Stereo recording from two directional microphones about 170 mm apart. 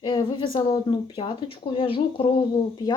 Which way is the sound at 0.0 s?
30° left (ahead or behind).